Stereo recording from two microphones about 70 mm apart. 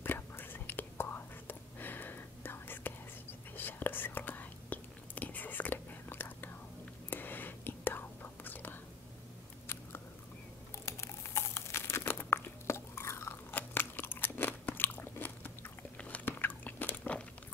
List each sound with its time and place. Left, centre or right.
0.0 s whispering: left
9.7 s biting: left
10.9 s crumpling: left